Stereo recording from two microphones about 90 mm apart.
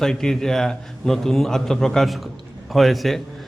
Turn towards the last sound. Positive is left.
turn(degrees=0)  # may be behind; listen again after turning